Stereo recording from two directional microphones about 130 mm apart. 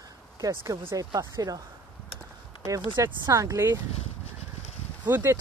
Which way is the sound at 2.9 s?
25° right (ahead or behind).